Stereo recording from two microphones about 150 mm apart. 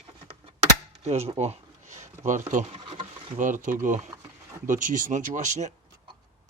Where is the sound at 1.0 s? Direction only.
45° right (ahead or behind).